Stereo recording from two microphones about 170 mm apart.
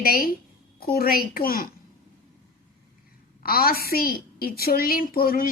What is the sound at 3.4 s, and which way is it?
A woman's voice, 60° left (ahead or behind).